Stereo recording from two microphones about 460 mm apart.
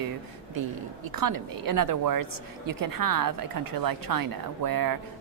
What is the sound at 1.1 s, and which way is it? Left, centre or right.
A woman's voice, right.